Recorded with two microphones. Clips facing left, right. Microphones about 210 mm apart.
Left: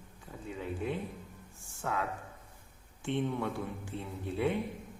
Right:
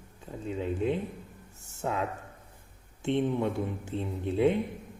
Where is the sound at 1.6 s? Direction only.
20° right (ahead or behind).